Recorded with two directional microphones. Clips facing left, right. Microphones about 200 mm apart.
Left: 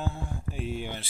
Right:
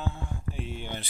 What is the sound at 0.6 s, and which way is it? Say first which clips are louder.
Speech: left 3 dB; 5° left (ahead or behind).